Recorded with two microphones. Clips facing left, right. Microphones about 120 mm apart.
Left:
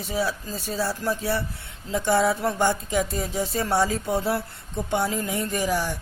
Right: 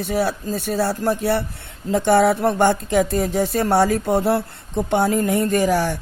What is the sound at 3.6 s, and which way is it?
Speech, 60° right (ahead or behind).